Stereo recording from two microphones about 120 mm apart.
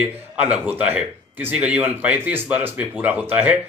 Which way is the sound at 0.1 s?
15° right (ahead or behind).